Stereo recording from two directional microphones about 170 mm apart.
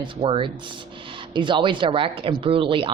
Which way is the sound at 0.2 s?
30° right (ahead or behind).